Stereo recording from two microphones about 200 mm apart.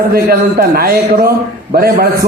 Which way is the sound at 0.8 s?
50° right (ahead or behind).